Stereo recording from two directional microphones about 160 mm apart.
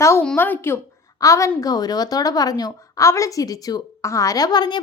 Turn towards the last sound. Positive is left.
turn(degrees=25)  # may be behind; listen again after turning